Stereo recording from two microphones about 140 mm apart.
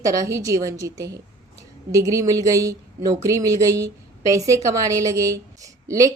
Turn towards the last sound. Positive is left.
turn(degrees=-25)  # may be behind; listen again after turning